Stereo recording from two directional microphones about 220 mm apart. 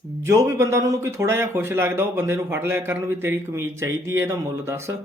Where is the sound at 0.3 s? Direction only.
15° right (ahead or behind).